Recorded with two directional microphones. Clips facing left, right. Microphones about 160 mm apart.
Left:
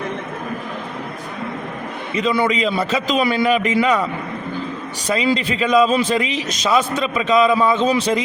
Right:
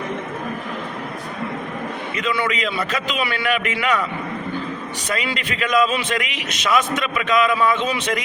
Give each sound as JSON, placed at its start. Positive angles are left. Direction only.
{"t": 2.1, "sound": "a man's voice", "side_deg": 40}
{"t": 5.0, "sound": "a man's voice", "side_deg": 30}